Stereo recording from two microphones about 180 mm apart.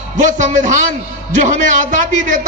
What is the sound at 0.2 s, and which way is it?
A man's voice, 45° right (ahead or behind).